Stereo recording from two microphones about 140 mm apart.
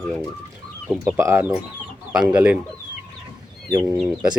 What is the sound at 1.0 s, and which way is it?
Speech, 20° right (ahead or behind).